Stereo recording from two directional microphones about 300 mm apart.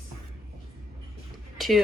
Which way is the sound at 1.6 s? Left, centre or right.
Centre.